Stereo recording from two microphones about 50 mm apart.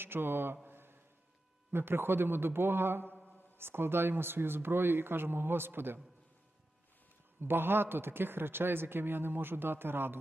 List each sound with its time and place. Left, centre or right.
0.0 s speech: right
0.7 s a sound: right
1.7 s speech: right
7.4 s speech: right